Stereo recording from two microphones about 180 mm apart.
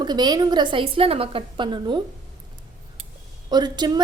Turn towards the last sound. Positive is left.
turn(degrees=-25)  # may be behind; listen again after turning